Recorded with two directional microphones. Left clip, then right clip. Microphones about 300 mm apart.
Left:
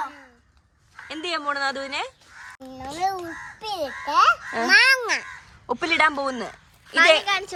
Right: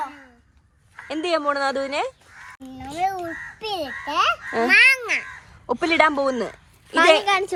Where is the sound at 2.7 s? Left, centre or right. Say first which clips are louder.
Even; left.